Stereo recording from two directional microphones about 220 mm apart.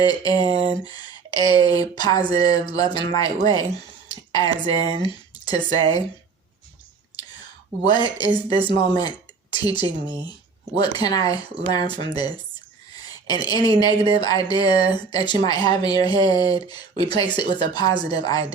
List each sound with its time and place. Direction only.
0.0 s speech: 15° left (ahead or behind)
7.9 s speech: 20° left (ahead or behind)